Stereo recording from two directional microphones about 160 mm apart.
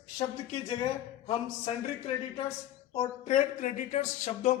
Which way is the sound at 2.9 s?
45° left (ahead or behind).